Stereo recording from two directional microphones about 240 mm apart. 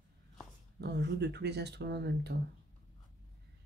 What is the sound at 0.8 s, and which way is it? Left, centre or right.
Speech, right.